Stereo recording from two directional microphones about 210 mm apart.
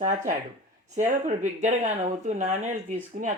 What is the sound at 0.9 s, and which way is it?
Speech, 35° right (ahead or behind).